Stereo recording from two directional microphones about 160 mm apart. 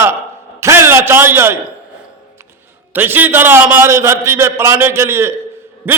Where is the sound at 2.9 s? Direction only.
10° right (ahead or behind).